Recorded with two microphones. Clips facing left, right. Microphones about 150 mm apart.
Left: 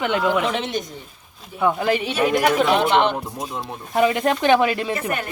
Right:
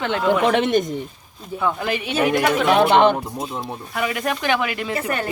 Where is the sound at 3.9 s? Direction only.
30° left (ahead or behind).